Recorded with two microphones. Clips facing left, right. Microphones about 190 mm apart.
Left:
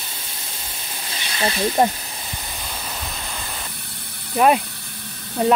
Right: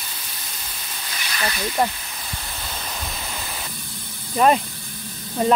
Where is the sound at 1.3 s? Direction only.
25° left (ahead or behind).